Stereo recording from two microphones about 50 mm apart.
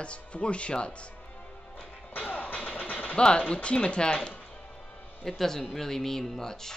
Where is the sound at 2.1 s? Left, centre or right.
Left.